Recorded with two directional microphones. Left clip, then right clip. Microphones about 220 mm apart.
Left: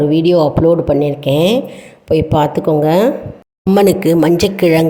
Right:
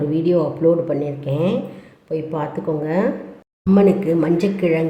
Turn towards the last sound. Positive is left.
turn(degrees=45)  # may be behind; listen again after turning